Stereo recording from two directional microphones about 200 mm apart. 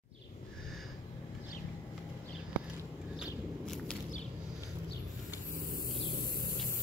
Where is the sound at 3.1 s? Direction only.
5° left (ahead or behind).